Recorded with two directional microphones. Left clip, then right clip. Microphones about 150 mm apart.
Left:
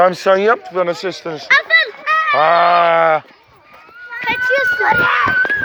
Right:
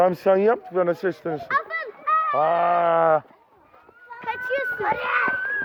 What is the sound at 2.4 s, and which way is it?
Sheep, 15° right (ahead or behind).